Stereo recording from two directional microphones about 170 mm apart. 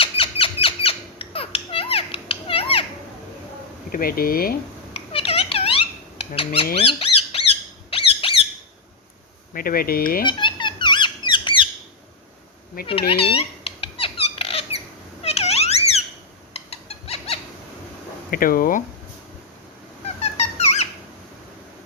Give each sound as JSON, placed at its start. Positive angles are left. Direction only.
{"t": 0.0, "sound": "squeak", "side_deg": 35}
{"t": 3.9, "sound": "speech", "side_deg": 60}
{"t": 4.9, "sound": "a sound", "side_deg": 35}
{"t": 6.8, "sound": "squeak", "side_deg": 35}
{"t": 9.5, "sound": "speech", "side_deg": 55}
{"t": 10.2, "sound": "squawk", "side_deg": 25}
{"t": 12.9, "sound": "squeak", "side_deg": 35}
{"t": 16.5, "sound": "bird", "side_deg": 40}
{"t": 18.3, "sound": "speech", "side_deg": 55}
{"t": 20.1, "sound": "dog", "side_deg": 40}